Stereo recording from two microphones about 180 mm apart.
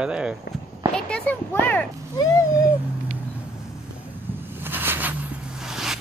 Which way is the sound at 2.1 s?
20° left (ahead or behind).